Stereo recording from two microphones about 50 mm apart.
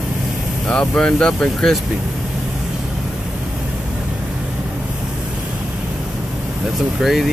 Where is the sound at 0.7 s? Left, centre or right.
Left.